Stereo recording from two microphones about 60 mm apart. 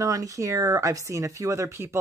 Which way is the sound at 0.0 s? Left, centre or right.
Right.